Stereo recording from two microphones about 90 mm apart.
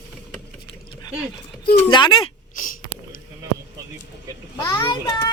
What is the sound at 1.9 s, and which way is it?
Speech, 70° left (ahead or behind).